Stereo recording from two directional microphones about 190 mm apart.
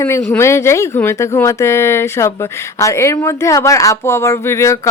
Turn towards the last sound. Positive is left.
turn(degrees=15)  # may be behind; listen again after turning